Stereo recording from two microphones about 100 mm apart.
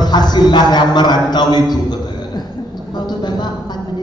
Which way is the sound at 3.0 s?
45° left (ahead or behind).